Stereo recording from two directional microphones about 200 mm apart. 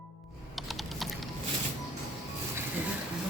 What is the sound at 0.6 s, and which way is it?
Typing, centre (ahead or behind).